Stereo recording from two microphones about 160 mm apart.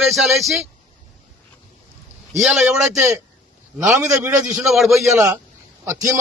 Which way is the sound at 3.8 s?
15° right (ahead or behind).